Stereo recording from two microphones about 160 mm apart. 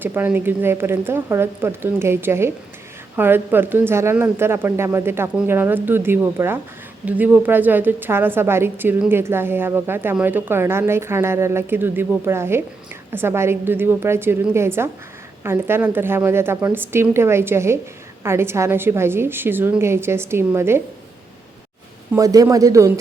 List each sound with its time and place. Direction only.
0.0 s a woman's voice: 10° right (ahead or behind)
22.1 s a man's voice: 20° right (ahead or behind)